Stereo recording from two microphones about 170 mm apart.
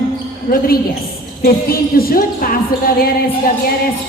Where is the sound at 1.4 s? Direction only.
60° left (ahead or behind).